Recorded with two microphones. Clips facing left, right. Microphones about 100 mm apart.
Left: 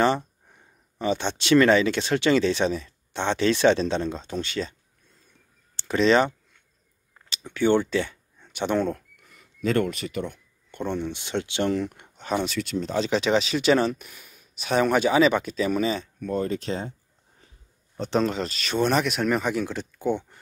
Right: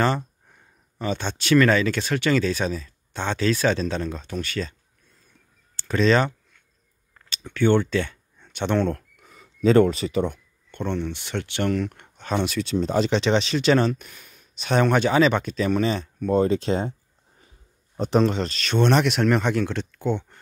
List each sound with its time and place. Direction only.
0.0 s speech: 20° left (ahead or behind)
5.8 s speech: 20° left (ahead or behind)
7.2 s a sound: 15° left (ahead or behind)
9.9 s speech: 30° right (ahead or behind)
10.7 s speech: 15° left (ahead or behind)
12.5 s speech: 20° right (ahead or behind)
13.1 s speech: 5° left (ahead or behind)
16.2 s speech: 25° right (ahead or behind)
18.1 s speech: centre (ahead or behind)